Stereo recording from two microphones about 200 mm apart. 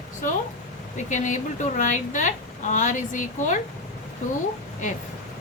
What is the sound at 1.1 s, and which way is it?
A woman's voice, 40° left (ahead or behind).